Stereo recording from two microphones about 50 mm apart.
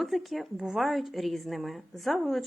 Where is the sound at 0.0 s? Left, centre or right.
Centre.